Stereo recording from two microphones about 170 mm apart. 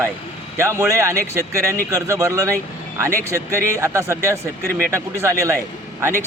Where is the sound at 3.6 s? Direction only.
15° right (ahead or behind).